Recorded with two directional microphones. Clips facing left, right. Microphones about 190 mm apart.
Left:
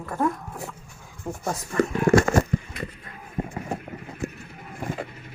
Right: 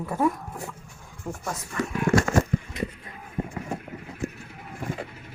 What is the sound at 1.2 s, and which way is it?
Speech, 20° left (ahead or behind).